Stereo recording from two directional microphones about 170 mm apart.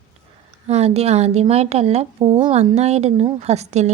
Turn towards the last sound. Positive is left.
turn(degrees=-40)  # may be behind; listen again after turning